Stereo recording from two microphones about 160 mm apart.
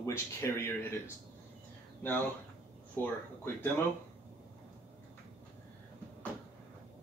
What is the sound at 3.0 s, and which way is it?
Speech, 10° left (ahead or behind).